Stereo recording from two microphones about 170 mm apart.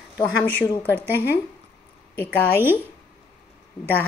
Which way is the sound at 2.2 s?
10° left (ahead or behind).